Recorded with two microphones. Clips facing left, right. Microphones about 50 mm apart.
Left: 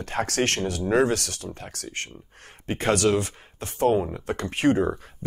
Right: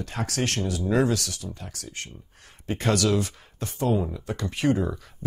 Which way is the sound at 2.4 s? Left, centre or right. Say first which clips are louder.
Left 2 dB; left.